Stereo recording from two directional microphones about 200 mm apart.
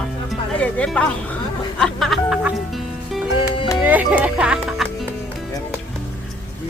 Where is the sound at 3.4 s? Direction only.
25° left (ahead or behind).